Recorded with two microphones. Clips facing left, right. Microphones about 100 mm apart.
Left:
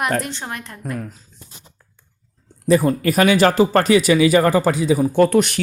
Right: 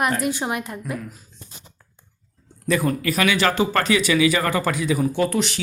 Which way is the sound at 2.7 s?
35° left (ahead or behind).